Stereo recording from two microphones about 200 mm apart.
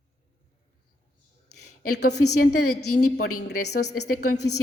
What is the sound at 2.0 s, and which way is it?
A woman's voice, 75° left (ahead or behind).